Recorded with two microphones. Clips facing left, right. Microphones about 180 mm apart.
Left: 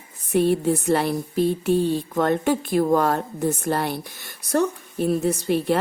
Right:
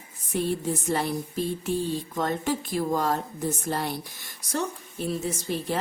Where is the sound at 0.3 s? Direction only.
65° left (ahead or behind).